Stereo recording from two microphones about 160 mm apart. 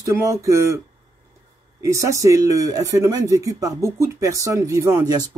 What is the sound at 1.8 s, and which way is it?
Speech, 20° right (ahead or behind).